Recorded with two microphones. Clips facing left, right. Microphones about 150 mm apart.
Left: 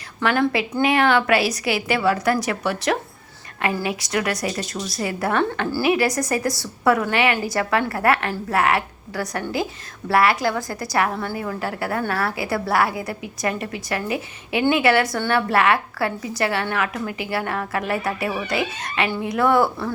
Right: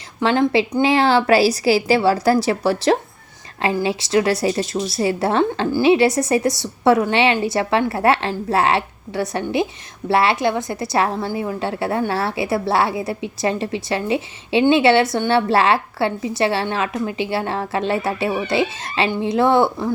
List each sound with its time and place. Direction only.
0.2 s a woman's voice: 25° right (ahead or behind)